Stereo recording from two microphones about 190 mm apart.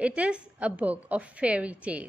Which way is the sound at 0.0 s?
5° right (ahead or behind).